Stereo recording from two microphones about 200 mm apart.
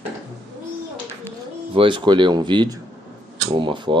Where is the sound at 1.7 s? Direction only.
25° right (ahead or behind).